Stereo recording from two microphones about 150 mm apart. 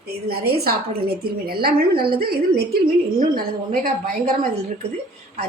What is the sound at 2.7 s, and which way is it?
Speech, 70° right (ahead or behind).